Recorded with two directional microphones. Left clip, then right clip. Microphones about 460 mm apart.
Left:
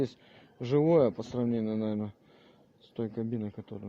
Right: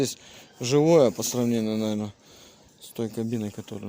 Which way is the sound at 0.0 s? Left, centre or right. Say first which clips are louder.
Right 6 dB; left.